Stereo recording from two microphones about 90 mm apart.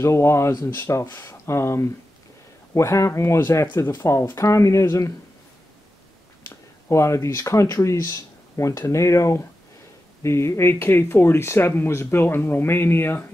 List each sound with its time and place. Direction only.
0.0 s speech: 30° left (ahead or behind)
6.4 s speech: 35° left (ahead or behind)